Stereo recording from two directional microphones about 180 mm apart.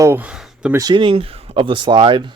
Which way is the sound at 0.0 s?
10° right (ahead or behind).